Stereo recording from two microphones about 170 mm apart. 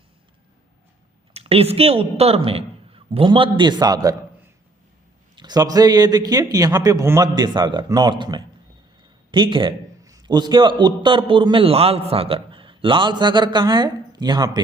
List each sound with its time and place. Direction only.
1.3 s a man's voice: 35° right (ahead or behind)
5.4 s a man's voice: 25° right (ahead or behind)